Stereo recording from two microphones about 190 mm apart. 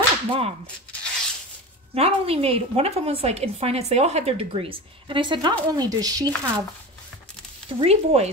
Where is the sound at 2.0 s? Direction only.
30° right (ahead or behind).